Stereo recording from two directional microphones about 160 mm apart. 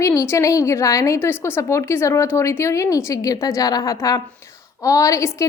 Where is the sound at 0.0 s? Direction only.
20° left (ahead or behind).